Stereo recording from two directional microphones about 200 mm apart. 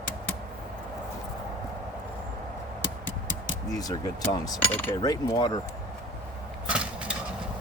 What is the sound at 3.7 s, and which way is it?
Speech, 20° left (ahead or behind).